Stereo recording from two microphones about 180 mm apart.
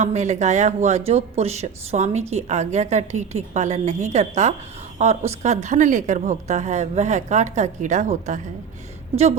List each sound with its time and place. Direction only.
0.0 s speech: 40° right (ahead or behind)